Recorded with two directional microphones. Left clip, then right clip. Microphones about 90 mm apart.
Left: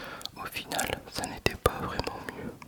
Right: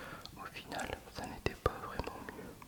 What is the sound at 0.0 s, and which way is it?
Whispering, 45° left (ahead or behind).